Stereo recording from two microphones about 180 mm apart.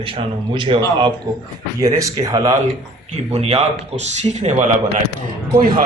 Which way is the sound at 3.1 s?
35° right (ahead or behind).